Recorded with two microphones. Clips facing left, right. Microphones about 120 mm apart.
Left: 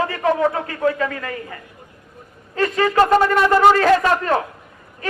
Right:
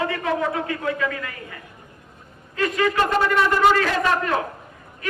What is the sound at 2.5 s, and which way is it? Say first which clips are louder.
A man's voice: left 4 dB; 35° left (ahead or behind).